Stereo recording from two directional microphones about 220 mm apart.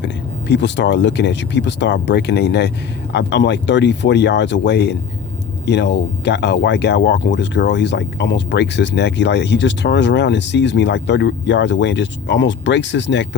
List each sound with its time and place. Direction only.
0.0 s speech: 50° left (ahead or behind)